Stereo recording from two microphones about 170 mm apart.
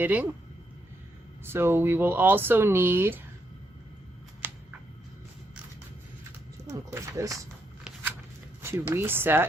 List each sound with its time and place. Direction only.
0.0 s speech: 10° right (ahead or behind)
1.5 s speech: 15° right (ahead or behind)
4.4 s a sound: 10° right (ahead or behind)
6.7 s speech: 15° right (ahead or behind)
8.6 s speech: 15° right (ahead or behind)